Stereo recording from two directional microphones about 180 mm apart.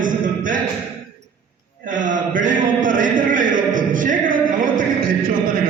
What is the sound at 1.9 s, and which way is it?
Speech, 45° right (ahead or behind).